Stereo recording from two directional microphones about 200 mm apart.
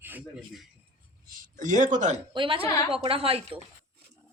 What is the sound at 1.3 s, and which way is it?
Speech, 40° right (ahead or behind).